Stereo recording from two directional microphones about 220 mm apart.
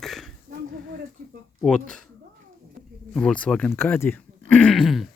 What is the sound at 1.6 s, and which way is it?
Speech, 5° left (ahead or behind).